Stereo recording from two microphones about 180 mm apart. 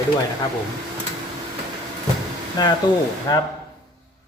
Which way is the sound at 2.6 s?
20° left (ahead or behind).